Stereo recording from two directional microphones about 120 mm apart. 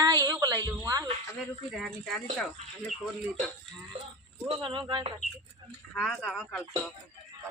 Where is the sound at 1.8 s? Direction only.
5° left (ahead or behind).